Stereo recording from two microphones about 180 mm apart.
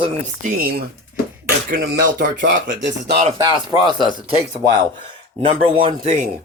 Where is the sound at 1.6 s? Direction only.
55° right (ahead or behind).